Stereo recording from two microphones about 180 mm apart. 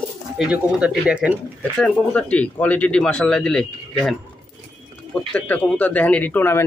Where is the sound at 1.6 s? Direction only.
5° left (ahead or behind).